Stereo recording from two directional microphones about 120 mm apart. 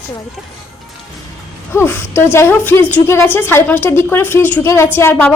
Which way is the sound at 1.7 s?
20° left (ahead or behind).